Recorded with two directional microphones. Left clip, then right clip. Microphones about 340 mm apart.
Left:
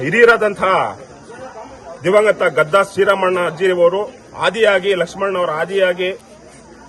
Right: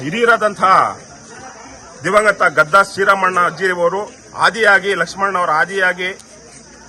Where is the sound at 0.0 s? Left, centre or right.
Centre.